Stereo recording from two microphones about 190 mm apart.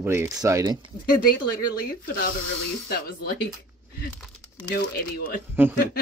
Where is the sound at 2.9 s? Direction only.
55° left (ahead or behind).